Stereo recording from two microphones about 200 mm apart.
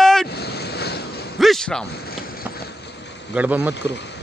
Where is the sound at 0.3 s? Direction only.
55° left (ahead or behind).